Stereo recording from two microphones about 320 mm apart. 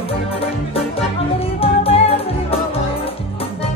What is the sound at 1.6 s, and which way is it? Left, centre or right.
Music, centre.